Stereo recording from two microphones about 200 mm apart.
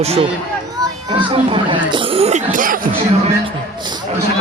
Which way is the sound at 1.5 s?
25° right (ahead or behind).